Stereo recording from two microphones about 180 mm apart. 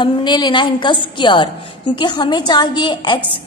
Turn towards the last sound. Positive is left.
turn(degrees=25)  # may be behind; listen again after turning